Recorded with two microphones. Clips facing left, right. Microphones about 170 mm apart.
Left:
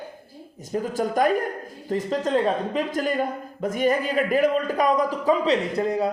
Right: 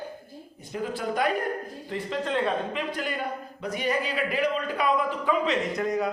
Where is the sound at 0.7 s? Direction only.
45° left (ahead or behind).